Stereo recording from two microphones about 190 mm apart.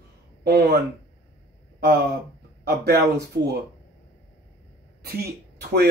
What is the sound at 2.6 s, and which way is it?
Speech, 55° right (ahead or behind).